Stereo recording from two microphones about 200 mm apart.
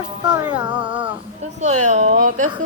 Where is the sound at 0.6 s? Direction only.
5° right (ahead or behind).